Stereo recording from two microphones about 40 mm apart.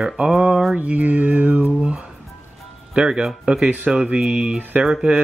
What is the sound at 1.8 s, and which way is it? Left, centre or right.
Speech, right.